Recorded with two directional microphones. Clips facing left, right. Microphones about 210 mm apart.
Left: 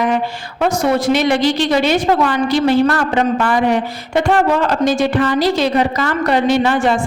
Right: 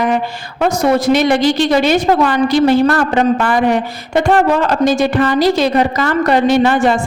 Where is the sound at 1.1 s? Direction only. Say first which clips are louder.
Right 2 dB; 45° right (ahead or behind).